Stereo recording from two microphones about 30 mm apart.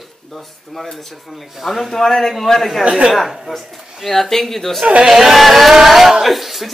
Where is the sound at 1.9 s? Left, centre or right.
Centre.